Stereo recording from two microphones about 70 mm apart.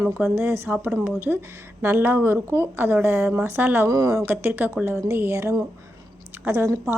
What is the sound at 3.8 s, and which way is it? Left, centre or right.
Speech, right.